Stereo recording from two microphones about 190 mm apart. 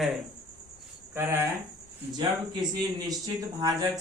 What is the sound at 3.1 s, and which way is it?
Speech, 20° right (ahead or behind).